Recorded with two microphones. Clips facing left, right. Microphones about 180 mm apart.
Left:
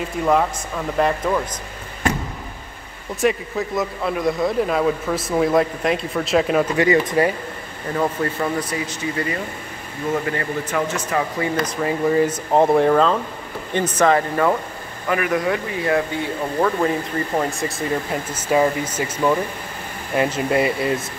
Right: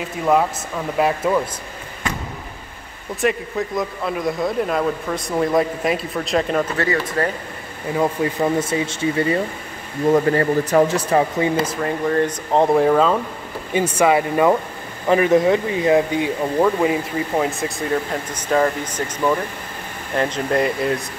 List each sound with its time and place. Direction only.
0.2 s speech: centre (ahead or behind)
3.2 s speech: centre (ahead or behind)
6.8 s speech: 20° left (ahead or behind)
7.9 s speech: 15° right (ahead or behind)
10.0 s speech: 35° right (ahead or behind)
11.7 s speech: centre (ahead or behind); by 14.5 s 15° right (ahead or behind)
15.0 s speech: 25° right (ahead or behind); by 21.0 s 5° left (ahead or behind)